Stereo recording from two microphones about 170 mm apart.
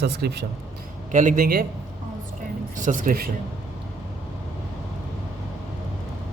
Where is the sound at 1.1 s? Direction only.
50° right (ahead or behind).